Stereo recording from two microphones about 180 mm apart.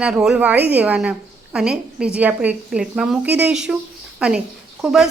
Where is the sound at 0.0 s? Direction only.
5° right (ahead or behind).